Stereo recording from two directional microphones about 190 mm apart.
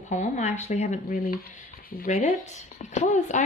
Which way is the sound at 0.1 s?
40° left (ahead or behind).